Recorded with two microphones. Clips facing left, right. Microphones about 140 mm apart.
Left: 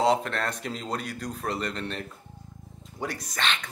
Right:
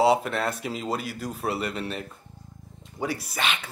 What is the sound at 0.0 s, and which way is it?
Speech, 5° right (ahead or behind).